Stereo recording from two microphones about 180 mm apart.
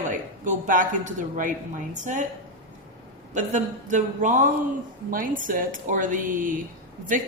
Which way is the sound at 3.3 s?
45° right (ahead or behind).